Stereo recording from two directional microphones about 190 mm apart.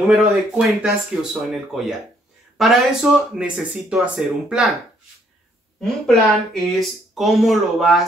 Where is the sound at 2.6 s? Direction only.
Centre (ahead or behind).